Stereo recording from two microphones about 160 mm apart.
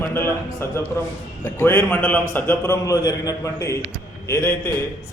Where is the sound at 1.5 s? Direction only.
15° left (ahead or behind).